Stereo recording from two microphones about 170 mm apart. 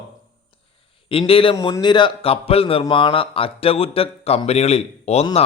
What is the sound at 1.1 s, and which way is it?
A man's voice, 35° left (ahead or behind).